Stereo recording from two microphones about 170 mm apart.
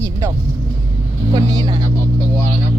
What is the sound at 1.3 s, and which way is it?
Speech, 25° right (ahead or behind).